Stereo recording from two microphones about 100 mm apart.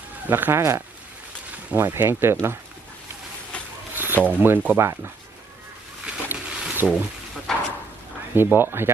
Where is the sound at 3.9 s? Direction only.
20° right (ahead or behind).